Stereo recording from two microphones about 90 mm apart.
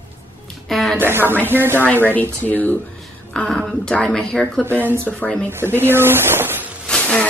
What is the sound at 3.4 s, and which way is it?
Speech, 5° left (ahead or behind).